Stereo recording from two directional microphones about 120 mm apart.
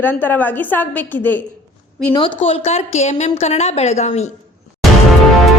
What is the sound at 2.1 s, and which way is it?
A woman's voice, 45° left (ahead or behind).